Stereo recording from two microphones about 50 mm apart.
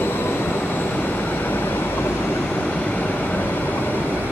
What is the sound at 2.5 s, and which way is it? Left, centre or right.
Train, left.